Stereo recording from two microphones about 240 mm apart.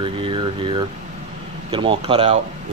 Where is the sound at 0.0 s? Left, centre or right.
Right.